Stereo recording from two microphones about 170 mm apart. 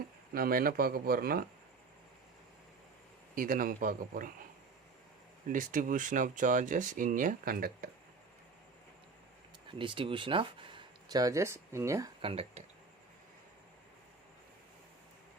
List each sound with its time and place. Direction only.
0.3 s speech: 60° right (ahead or behind)
3.3 s speech: 55° right (ahead or behind)
5.5 s speech: 50° right (ahead or behind)
9.7 s speech: 30° right (ahead or behind)
12.2 s speech: 35° right (ahead or behind)